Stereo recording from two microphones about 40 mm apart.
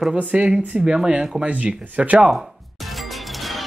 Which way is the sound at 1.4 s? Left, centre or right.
Right.